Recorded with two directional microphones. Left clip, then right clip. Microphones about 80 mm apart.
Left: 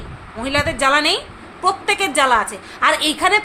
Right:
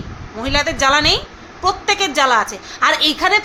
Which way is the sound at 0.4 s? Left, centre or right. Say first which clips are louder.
Right 1 dB; centre.